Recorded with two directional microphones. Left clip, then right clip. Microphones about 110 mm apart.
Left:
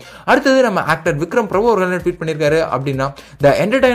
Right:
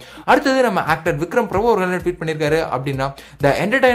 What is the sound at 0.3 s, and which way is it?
Speech, 25° left (ahead or behind).